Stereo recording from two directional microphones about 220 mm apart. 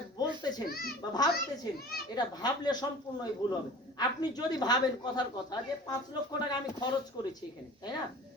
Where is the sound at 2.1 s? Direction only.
20° left (ahead or behind).